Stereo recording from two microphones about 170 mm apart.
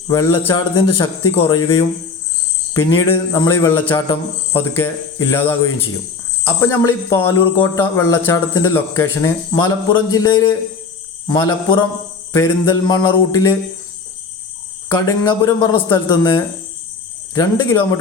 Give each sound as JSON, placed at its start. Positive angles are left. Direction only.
{"t": 0.1, "sound": "speech", "side_deg": 15}
{"t": 2.7, "sound": "speech", "side_deg": 15}
{"t": 14.8, "sound": "speech", "side_deg": 15}